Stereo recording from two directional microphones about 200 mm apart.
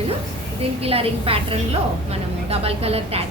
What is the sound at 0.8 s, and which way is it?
A woman's voice, 30° right (ahead or behind).